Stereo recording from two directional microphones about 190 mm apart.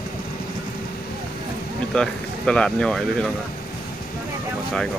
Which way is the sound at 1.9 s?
5° left (ahead or behind).